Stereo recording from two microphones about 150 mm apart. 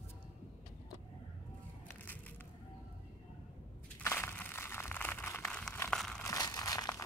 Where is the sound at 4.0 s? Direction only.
15° left (ahead or behind).